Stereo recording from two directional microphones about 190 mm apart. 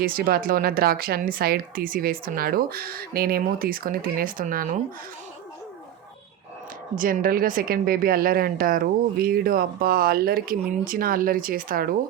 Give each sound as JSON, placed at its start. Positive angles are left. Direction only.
{"t": 0.0, "sound": "speech", "side_deg": -50}
{"t": 6.9, "sound": "speech", "side_deg": -45}